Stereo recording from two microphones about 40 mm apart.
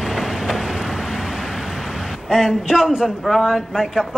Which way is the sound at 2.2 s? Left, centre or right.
Centre.